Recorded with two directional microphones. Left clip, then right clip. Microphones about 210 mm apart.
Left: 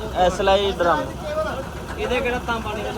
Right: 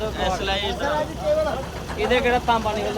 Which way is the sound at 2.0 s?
35° right (ahead or behind).